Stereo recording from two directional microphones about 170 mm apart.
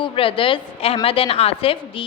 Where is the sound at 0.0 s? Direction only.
30° left (ahead or behind).